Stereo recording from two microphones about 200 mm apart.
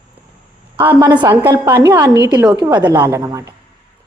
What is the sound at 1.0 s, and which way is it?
A woman's voice, 20° right (ahead or behind).